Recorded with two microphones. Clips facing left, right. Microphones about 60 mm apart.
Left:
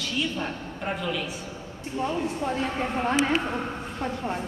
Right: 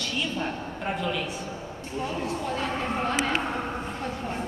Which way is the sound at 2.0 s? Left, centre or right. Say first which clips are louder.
Left 3 dB; left.